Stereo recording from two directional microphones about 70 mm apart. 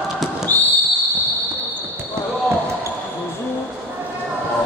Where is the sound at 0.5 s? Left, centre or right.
Left.